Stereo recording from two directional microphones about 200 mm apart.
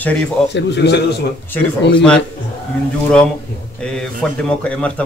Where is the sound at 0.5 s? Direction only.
55° left (ahead or behind).